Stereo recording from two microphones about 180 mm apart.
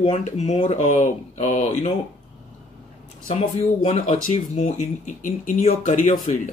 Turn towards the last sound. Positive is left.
turn(degrees=40)  # may be behind; listen again after turning